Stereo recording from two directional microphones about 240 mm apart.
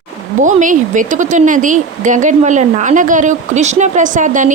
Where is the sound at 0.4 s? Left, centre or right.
Right.